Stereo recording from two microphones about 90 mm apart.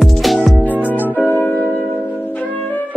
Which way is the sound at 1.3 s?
20° left (ahead or behind).